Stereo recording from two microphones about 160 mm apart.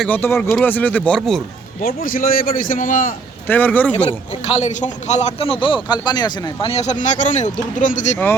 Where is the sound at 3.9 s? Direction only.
45° left (ahead or behind); by 6.7 s 25° left (ahead or behind).